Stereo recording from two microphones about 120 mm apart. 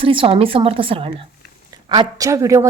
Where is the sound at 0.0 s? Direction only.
45° right (ahead or behind).